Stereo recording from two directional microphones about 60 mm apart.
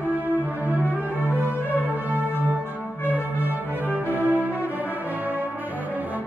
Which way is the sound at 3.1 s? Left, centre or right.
Right.